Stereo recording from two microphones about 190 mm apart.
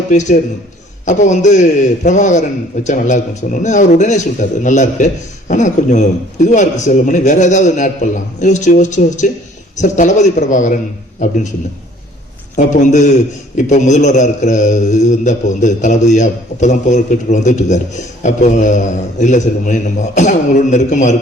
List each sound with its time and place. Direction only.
0.1 s a man's voice: 40° left (ahead or behind)
12.5 s a man's voice: 40° left (ahead or behind)